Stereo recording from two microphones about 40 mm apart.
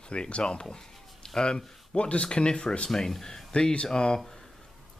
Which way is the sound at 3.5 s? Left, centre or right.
Left.